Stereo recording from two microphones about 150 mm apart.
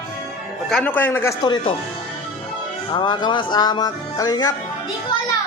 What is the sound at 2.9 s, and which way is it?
Speech, 30° left (ahead or behind).